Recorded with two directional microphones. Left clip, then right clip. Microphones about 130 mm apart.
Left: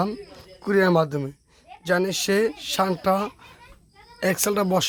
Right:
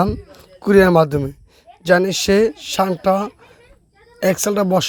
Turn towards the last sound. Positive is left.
turn(degrees=-30)  # may be behind; listen again after turning